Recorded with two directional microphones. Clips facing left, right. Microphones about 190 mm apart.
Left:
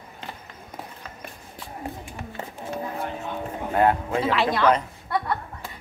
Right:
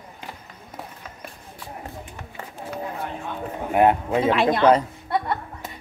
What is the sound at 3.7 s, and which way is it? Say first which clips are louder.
Speech: right 3 dB; 20° right (ahead or behind).